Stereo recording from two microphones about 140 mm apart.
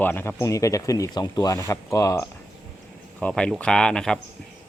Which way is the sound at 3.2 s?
10° left (ahead or behind).